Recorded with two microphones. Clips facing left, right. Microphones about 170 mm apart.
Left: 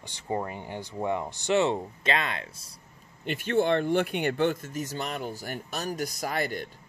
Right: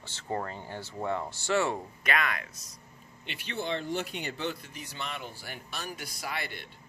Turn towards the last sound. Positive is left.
turn(degrees=45)  # may be behind; listen again after turning